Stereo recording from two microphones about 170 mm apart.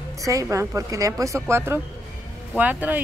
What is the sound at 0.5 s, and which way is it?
A woman's voice, 20° right (ahead or behind).